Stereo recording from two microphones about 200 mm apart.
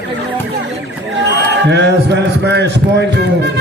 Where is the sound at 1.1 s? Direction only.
60° right (ahead or behind).